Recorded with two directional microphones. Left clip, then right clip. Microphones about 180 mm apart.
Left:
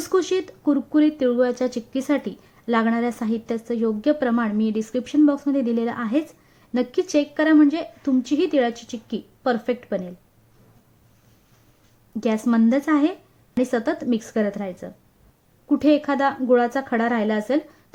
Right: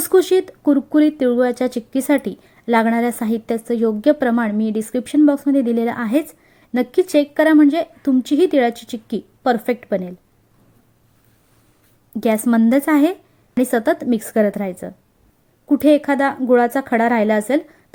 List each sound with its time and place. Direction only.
0.1 s speech: 25° right (ahead or behind)
12.2 s speech: 20° right (ahead or behind)
15.7 s speech: 20° right (ahead or behind)